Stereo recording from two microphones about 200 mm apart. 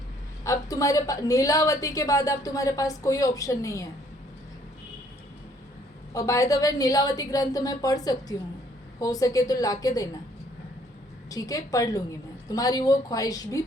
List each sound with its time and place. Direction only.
0.4 s a woman's voice: 15° left (ahead or behind)
6.1 s a woman's voice: 15° left (ahead or behind)
11.3 s a woman's voice: 15° left (ahead or behind)